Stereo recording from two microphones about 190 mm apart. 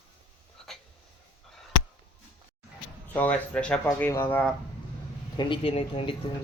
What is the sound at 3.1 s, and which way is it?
Speech, 10° left (ahead or behind).